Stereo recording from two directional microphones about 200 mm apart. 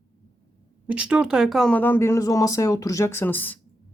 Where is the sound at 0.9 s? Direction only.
5° right (ahead or behind).